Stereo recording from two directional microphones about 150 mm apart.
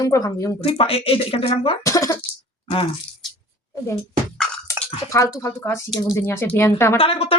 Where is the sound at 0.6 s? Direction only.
40° left (ahead or behind).